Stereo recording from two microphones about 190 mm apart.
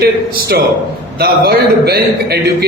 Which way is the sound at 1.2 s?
55° right (ahead or behind).